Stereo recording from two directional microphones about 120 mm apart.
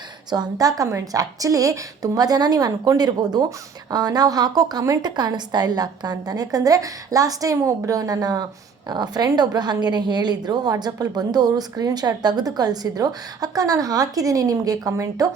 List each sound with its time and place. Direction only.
0.3 s a woman's voice: 35° right (ahead or behind)